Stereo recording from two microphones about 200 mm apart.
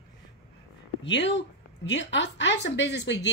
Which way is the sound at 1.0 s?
65° left (ahead or behind).